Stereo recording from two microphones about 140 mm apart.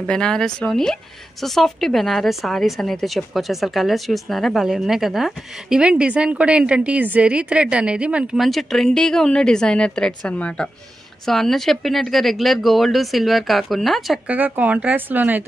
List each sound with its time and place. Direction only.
0.0 s speech: 5° left (ahead or behind)
14.3 s speech: 10° right (ahead or behind)